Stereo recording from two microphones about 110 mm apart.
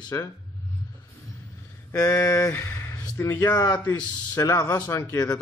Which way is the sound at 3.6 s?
40° left (ahead or behind).